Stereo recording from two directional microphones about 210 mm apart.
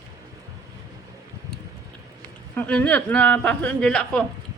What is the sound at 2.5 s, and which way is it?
A woman's voice, 5° left (ahead or behind).